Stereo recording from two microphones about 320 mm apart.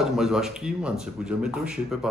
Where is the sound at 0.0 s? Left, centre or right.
Centre.